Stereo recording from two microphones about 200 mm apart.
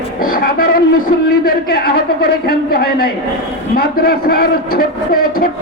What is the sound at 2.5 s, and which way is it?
Speech, 50° left (ahead or behind).